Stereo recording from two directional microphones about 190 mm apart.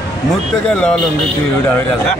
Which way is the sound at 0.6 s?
5° left (ahead or behind).